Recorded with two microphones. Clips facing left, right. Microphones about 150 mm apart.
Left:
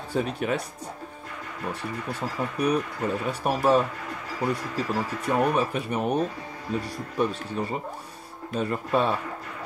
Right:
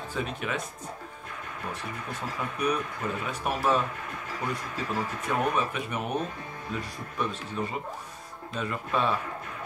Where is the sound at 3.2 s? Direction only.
40° left (ahead or behind).